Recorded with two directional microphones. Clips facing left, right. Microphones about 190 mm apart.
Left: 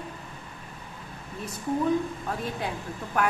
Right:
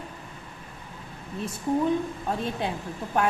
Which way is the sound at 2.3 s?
25° right (ahead or behind).